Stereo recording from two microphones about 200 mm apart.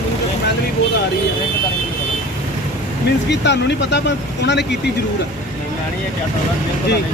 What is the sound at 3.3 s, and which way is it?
Speech, 60° left (ahead or behind).